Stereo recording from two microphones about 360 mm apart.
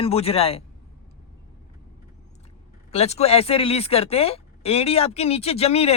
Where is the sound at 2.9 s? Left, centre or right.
Centre.